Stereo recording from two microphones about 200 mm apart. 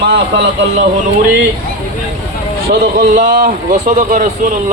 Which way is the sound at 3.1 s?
40° right (ahead or behind).